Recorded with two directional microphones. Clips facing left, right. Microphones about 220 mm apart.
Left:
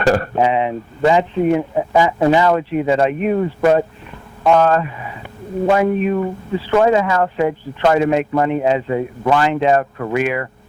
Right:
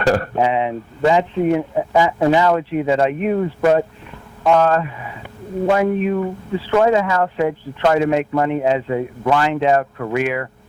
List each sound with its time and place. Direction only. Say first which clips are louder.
0.0 s speech: left 1 dB; 15° left (ahead or behind)